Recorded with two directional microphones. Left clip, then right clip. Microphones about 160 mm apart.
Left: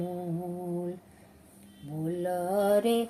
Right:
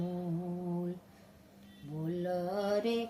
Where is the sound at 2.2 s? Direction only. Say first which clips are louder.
Left 7 dB; 20° left (ahead or behind).